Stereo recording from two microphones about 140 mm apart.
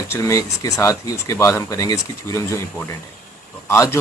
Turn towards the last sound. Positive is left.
turn(degrees=20)  # may be behind; listen again after turning